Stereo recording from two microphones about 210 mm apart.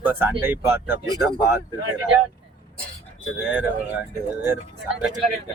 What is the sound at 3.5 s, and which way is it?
Speech, 10° right (ahead or behind).